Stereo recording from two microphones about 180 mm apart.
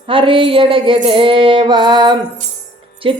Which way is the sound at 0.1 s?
30° right (ahead or behind).